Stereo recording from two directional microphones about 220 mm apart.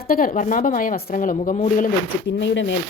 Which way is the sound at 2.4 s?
55° left (ahead or behind).